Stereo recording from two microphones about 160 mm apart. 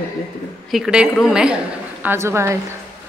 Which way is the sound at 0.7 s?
5° right (ahead or behind).